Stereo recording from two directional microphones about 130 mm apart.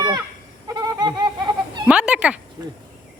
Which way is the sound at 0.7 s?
30° right (ahead or behind).